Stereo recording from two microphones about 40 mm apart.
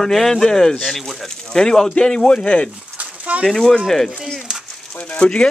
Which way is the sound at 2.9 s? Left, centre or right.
Right.